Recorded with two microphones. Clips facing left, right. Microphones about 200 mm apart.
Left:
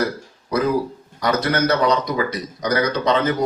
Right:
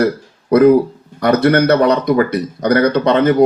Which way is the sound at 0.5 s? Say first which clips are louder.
Right 11 dB; 60° right (ahead or behind).